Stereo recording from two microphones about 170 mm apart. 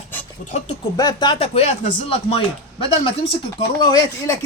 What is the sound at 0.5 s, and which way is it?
Speech, 40° left (ahead or behind).